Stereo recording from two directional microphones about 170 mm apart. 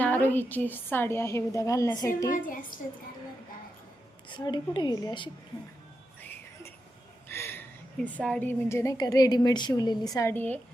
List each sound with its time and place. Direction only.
0.0 s a woman's voice: 10° left (ahead or behind)
2.3 s a woman's voice: 50° left (ahead or behind)
4.3 s a woman's voice: 25° left (ahead or behind)
7.3 s a woman's voice: 15° left (ahead or behind)